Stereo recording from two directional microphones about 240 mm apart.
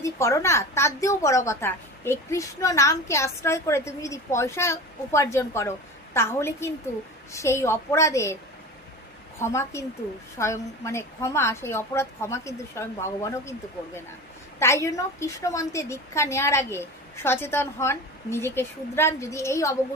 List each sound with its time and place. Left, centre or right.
0.0 s a woman's voice: centre
9.4 s a woman's voice: centre
14.6 s a woman's voice: centre